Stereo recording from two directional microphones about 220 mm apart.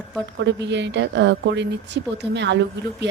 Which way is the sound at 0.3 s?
55° right (ahead or behind).